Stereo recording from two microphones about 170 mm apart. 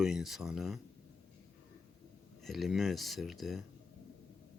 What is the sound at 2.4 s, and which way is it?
Speech, centre (ahead or behind).